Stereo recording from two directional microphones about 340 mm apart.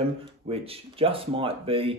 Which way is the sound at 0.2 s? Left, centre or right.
Centre.